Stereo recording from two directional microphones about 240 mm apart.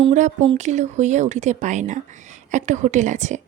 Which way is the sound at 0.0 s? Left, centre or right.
Right.